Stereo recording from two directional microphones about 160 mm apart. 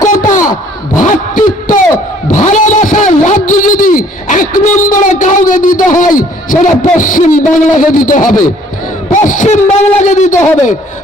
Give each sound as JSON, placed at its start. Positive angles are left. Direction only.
{"t": 0.1, "sound": "a sound", "side_deg": 55}
{"t": 2.3, "sound": "vehicle", "side_deg": 50}
{"t": 9.2, "sound": "speech", "side_deg": 50}
{"t": 10.3, "sound": "a man's voice", "side_deg": 15}